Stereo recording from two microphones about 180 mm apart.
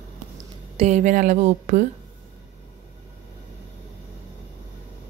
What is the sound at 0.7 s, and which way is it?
Speech, 40° right (ahead or behind).